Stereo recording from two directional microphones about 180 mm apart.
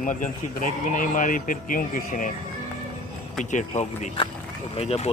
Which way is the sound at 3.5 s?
40° left (ahead or behind).